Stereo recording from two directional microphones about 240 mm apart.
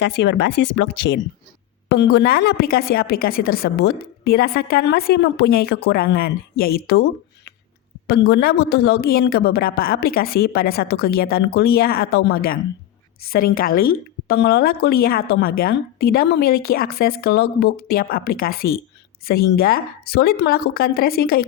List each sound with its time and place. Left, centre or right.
0.0 s speech: left